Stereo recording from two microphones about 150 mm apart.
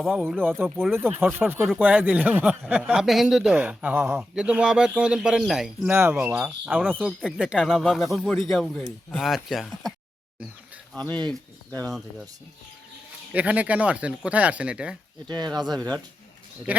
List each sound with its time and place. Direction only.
0.0 s speech: centre (ahead or behind)
0.4 s speech: 15° right (ahead or behind)
10.9 s speech: 10° left (ahead or behind)
13.3 s speech: 10° right (ahead or behind)
15.3 s speech: 30° right (ahead or behind)